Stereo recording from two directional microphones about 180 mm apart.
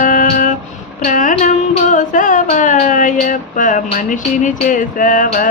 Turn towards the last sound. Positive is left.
turn(degrees=45)  # may be behind; listen again after turning